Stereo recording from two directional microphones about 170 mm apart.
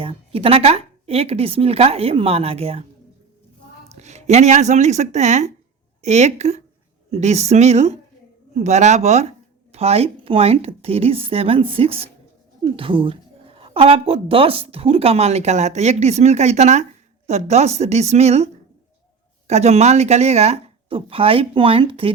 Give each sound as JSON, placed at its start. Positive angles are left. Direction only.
{"t": 0.0, "sound": "a woman's voice", "side_deg": -35}
{"t": 4.0, "sound": "a woman's voice", "side_deg": -40}